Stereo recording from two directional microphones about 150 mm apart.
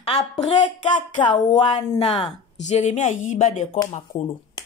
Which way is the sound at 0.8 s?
30° left (ahead or behind).